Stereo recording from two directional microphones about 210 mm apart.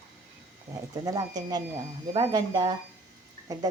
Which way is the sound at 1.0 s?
15° right (ahead or behind).